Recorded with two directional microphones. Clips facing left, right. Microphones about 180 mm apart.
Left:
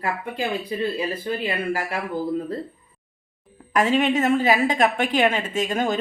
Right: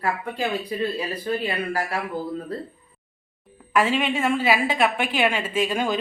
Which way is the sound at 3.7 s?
40° left (ahead or behind).